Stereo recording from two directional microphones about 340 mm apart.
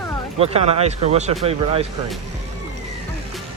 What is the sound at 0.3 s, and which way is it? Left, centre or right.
Speech, centre.